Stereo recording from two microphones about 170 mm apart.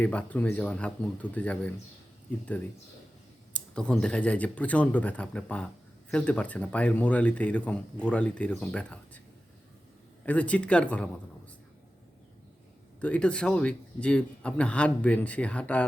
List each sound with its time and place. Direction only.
0.0 s speech: 10° left (ahead or behind)
3.5 s speech: 5° left (ahead or behind)
10.2 s speech: 10° left (ahead or behind)
13.0 s speech: 5° left (ahead or behind)